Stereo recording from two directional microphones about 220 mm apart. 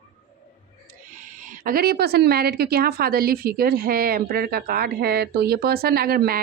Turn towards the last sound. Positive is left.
turn(degrees=-45)  # may be behind; listen again after turning